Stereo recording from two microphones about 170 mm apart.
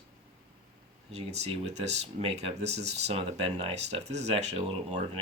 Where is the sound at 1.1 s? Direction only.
40° right (ahead or behind).